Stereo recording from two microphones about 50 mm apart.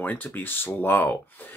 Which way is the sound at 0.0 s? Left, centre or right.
Left.